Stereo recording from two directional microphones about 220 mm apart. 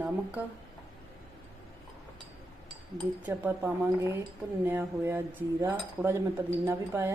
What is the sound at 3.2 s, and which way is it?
Cutlery, 10° right (ahead or behind).